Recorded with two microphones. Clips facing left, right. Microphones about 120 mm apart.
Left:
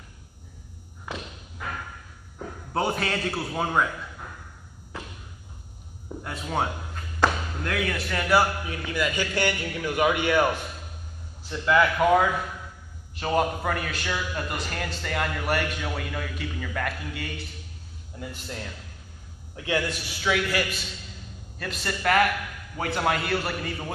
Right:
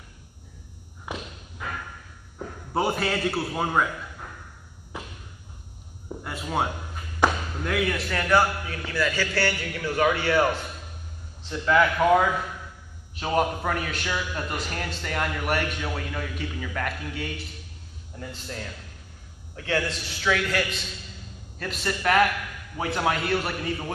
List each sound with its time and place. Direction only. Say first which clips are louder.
1.1 s thump: right 1 dB; 15° right (ahead or behind)
2.3 s a man's voice: right 1 dB; 5° right (ahead or behind)
6.0 s a sound: even; 5° right (ahead or behind)
7.2 s a man's voice: right 1 dB; 5° right (ahead or behind); by 10.6 s 15° left (ahead or behind)
11.6 s a man's voice: even; 5° left (ahead or behind)
19.5 s a man's voice: even; 15° left (ahead or behind); by 23.9 s centre (ahead or behind)